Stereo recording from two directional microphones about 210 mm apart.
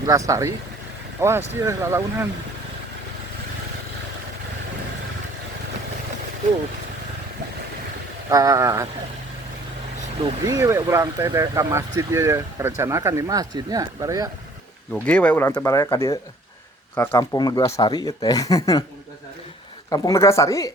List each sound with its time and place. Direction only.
0.3 s speech: 15° right (ahead or behind)
8.3 s speech: 15° right (ahead or behind)
10.4 s speech: 15° right (ahead or behind)
14.9 s speech: 5° left (ahead or behind)
19.9 s speech: 15° left (ahead or behind)